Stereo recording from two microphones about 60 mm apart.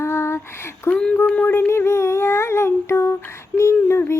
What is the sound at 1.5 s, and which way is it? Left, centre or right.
Speech, left.